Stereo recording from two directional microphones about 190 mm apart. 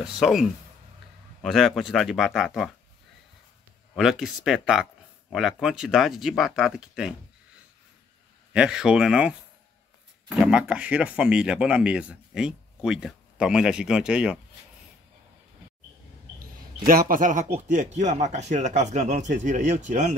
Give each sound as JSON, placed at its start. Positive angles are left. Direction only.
{"t": 0.0, "sound": "speech", "side_deg": -5}
{"t": 3.9, "sound": "speech", "side_deg": 0}
{"t": 8.5, "sound": "speech", "side_deg": -5}
{"t": 10.3, "sound": "speech", "side_deg": -5}
{"t": 16.3, "sound": "speech", "side_deg": -50}